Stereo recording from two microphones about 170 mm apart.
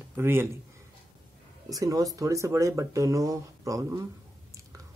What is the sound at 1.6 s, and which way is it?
Speech, 20° right (ahead or behind).